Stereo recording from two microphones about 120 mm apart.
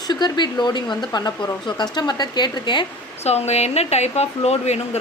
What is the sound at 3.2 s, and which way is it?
Speech, 65° left (ahead or behind).